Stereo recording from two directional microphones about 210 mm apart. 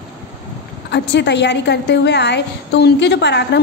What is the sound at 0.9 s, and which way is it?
A woman's voice, 55° left (ahead or behind).